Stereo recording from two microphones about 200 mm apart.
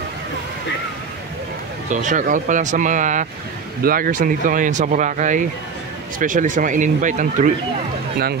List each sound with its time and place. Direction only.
1.9 s speech: 40° right (ahead or behind)